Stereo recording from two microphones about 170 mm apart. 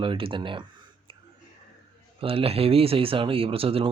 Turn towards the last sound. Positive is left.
turn(degrees=-35)  # may be behind; listen again after turning